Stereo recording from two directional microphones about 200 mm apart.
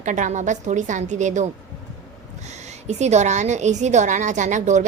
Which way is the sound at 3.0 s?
35° right (ahead or behind).